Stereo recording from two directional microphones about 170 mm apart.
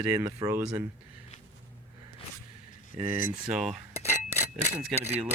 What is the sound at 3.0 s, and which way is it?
Speech, 35° right (ahead or behind).